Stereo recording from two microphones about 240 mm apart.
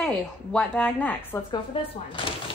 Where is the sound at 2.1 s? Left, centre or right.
Left.